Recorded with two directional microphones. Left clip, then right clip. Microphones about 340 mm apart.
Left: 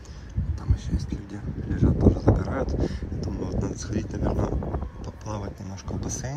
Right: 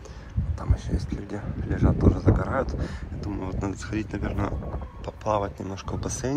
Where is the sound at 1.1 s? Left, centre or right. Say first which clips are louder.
Right 3 dB; centre.